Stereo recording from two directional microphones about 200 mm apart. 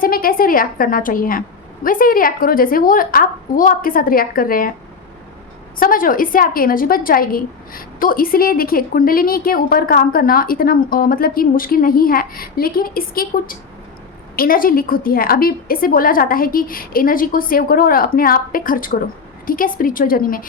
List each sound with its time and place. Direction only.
0.0 s a woman's voice: 45° left (ahead or behind)
5.8 s a woman's voice: 45° left (ahead or behind)